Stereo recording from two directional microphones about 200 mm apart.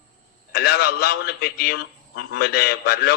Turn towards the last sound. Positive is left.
turn(degrees=55)  # may be behind; listen again after turning